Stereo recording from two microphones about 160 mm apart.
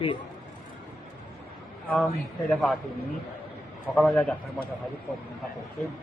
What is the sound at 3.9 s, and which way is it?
Speech, centre (ahead or behind).